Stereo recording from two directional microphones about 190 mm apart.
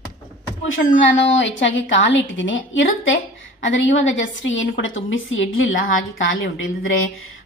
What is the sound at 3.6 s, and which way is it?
A woman's voice, 75° left (ahead or behind).